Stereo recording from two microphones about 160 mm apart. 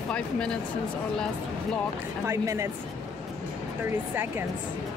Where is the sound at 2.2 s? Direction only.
15° right (ahead or behind).